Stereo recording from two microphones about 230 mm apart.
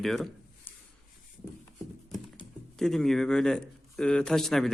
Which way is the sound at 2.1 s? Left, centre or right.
Centre.